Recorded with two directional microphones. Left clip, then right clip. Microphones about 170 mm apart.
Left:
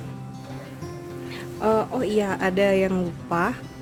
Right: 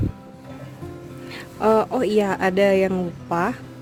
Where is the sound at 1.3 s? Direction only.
45° right (ahead or behind).